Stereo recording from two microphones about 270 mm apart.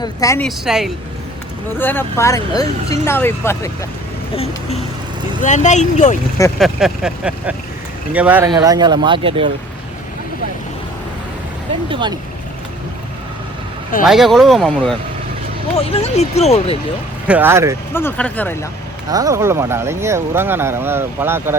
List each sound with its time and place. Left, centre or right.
0.0 s speech: centre
0.4 s speech: centre
5.4 s speech: left
6.6 s speech: centre
11.9 s speech: centre
14.0 s speech: centre
15.9 s speech: left
17.2 s speech: centre
17.9 s speech: centre
19.1 s speech: centre